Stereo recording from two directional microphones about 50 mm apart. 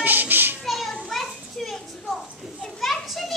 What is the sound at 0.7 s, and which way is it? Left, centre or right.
Children playing, centre.